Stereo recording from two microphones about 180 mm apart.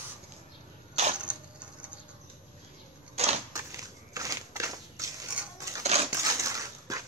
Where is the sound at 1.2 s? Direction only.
5° right (ahead or behind).